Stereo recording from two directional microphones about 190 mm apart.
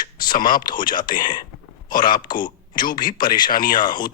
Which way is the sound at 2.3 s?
25° left (ahead or behind).